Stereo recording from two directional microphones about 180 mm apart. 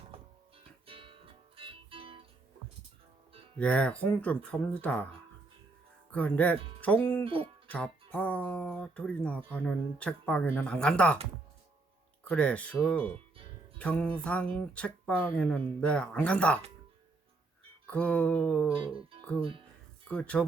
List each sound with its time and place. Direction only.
0.1 s music: 30° right (ahead or behind)
3.6 s speech: 5° left (ahead or behind)
6.1 s speech: 10° left (ahead or behind)
12.3 s speech: 5° left (ahead or behind)
17.8 s speech: 5° left (ahead or behind)
18.7 s music: 30° right (ahead or behind)
20.1 s speech: 5° left (ahead or behind)